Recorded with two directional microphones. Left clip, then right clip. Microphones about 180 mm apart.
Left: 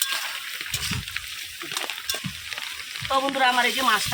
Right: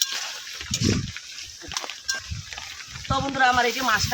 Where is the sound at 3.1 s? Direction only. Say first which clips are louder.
Even; 10° right (ahead or behind).